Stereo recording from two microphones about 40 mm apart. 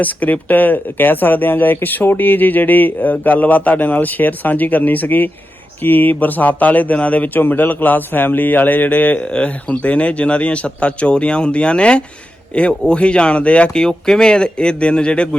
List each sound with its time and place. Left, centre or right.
0.0 s speech: left
7.3 s speech: left
9.1 s speech: left
13.7 s speech: centre